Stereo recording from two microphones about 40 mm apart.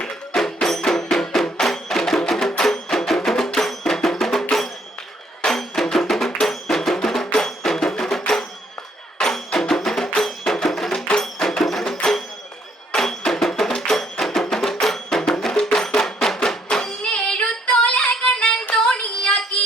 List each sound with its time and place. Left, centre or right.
0.1 s music: centre
1.5 s wood block: centre
2.6 s music: centre
17.0 s child singing: left
17.7 s female singing: left
18.7 s child singing: centre